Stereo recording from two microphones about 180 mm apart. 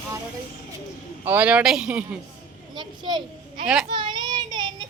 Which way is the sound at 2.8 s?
25° right (ahead or behind).